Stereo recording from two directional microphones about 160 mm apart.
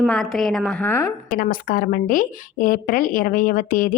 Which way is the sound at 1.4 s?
60° left (ahead or behind).